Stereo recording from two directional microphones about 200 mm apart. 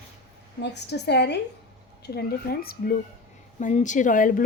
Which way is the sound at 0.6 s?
60° left (ahead or behind).